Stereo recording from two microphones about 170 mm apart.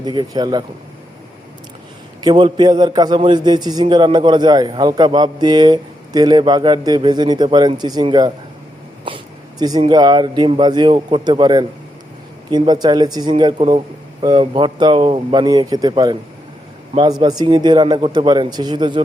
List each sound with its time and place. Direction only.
0.0 s a man's voice: 25° right (ahead or behind)
2.2 s a man's voice: 25° right (ahead or behind)
9.0 s a sound: 25° right (ahead or behind)
9.9 s a man's voice: 25° right (ahead or behind)